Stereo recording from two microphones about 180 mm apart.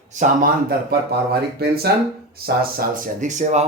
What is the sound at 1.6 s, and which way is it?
Speech, 60° right (ahead or behind).